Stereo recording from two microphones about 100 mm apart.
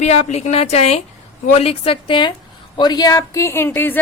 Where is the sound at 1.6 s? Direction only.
75° left (ahead or behind); by 4.0 s 20° left (ahead or behind).